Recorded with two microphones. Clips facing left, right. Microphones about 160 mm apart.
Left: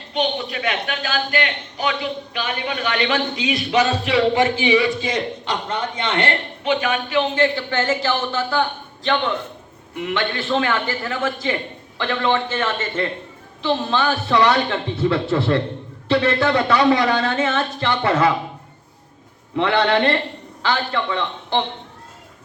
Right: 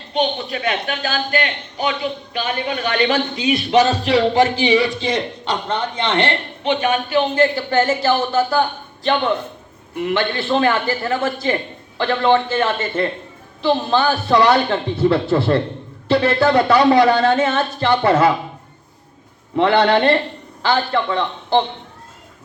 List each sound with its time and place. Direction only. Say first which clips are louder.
0.1 s a man's voice: right 2 dB; 30° right (ahead or behind)
10.0 s a man's voice: right 4 dB; 35° right (ahead or behind)
19.5 s a man's voice: right 3 dB; 35° right (ahead or behind)